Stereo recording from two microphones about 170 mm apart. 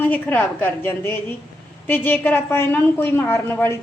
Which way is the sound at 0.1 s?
10° left (ahead or behind).